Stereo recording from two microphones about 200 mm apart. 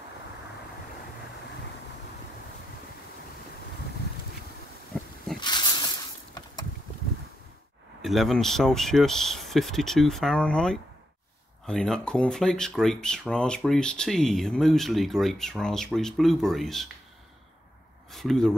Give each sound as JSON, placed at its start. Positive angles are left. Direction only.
{"t": 5.4, "sound": "snake", "side_deg": 20}
{"t": 8.0, "sound": "speech", "side_deg": 0}
{"t": 18.1, "sound": "speech", "side_deg": 0}